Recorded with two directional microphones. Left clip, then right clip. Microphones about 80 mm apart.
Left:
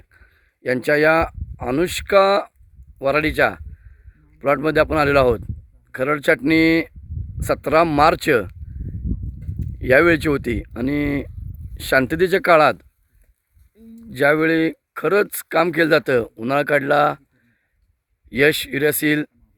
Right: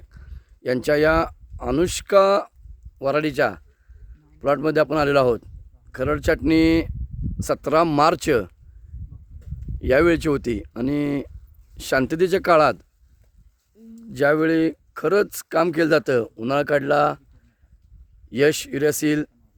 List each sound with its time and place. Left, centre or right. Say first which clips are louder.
0.1 s a sound: left 3 dB; right
0.9 s speech: left 3 dB; centre
9.7 s speech: left 3 dB; centre
14.2 s speech: left 2 dB; centre
18.3 s speech: left 3 dB; centre